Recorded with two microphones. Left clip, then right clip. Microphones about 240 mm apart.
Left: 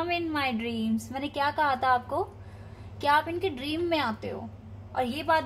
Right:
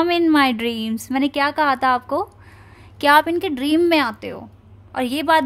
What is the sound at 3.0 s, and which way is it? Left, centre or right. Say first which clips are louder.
A woman's voice: right 10 dB; right.